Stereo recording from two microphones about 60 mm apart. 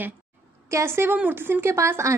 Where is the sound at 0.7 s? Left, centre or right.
Right.